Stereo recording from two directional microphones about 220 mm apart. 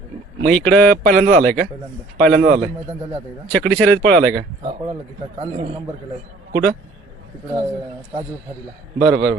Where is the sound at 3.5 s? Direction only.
5° left (ahead or behind).